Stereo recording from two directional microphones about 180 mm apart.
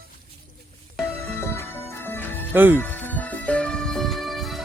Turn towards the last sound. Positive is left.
turn(degrees=0)  # may be behind; listen again after turning